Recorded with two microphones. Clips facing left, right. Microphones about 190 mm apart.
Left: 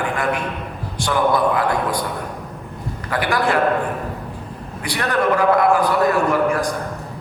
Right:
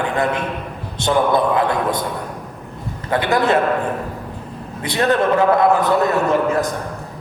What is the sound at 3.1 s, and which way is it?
Speech, 25° right (ahead or behind).